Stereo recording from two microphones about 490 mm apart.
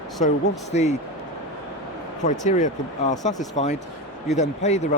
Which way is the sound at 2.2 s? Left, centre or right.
Centre.